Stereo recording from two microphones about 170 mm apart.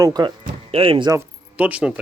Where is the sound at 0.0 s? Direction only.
25° right (ahead or behind).